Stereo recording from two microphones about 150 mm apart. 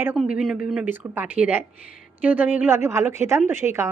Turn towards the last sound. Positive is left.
turn(degrees=-15)  # may be behind; listen again after turning